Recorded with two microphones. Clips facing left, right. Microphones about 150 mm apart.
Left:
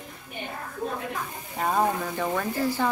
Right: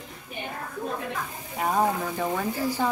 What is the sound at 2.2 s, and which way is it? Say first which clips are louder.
Speech: left 2 dB; 10° right (ahead or behind).